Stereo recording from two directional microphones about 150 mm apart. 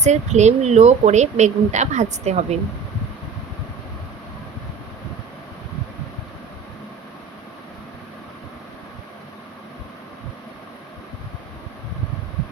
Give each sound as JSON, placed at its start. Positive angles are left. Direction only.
{"t": 0.0, "sound": "speech", "side_deg": -50}